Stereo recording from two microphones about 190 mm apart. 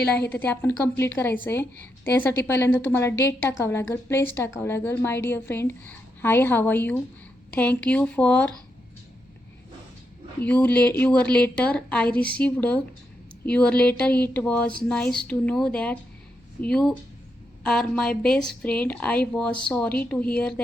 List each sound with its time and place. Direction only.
0.0 s a woman's voice: 55° left (ahead or behind)
0.3 s a woman's voice: 10° left (ahead or behind)
10.4 s a woman's voice: 5° left (ahead or behind)